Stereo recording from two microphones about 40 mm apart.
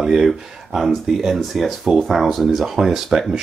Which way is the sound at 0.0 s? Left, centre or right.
Centre.